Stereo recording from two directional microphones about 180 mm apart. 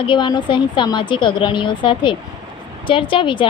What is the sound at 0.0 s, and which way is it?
Speech, 25° left (ahead or behind).